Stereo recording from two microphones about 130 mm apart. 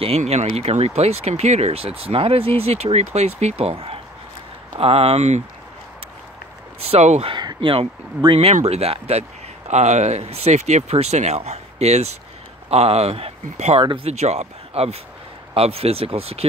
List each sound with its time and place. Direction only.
0.0 s speech: 55° right (ahead or behind)
6.8 s speech: 55° right (ahead or behind)
7.3 s speech: 40° right (ahead or behind)
8.5 s speech: 55° right (ahead or behind)
14.1 s speech: 60° right (ahead or behind)